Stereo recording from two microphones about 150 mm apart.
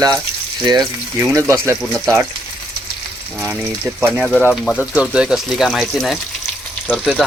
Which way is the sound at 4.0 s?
5° right (ahead or behind).